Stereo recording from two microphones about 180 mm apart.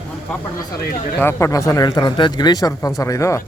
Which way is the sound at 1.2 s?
15° left (ahead or behind).